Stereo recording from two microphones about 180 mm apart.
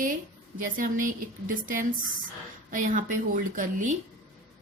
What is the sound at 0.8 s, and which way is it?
Speech, 45° right (ahead or behind).